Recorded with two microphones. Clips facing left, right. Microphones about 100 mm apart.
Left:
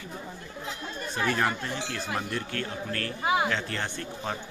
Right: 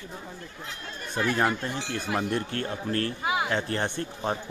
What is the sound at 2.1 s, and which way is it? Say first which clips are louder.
Speech: right 6 dB; 20° right (ahead or behind).